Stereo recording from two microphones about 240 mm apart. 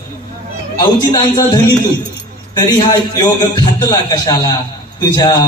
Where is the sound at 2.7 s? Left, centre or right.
Centre.